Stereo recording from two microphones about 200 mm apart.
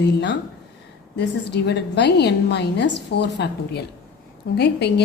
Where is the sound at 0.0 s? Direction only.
60° left (ahead or behind).